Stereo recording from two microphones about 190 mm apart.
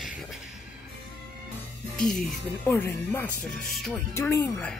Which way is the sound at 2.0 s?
Centre (ahead or behind).